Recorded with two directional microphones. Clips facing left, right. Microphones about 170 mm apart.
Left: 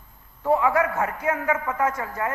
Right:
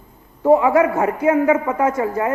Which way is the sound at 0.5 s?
15° right (ahead or behind).